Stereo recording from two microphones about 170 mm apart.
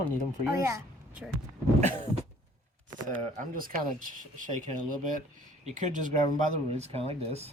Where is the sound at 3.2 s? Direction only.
50° right (ahead or behind).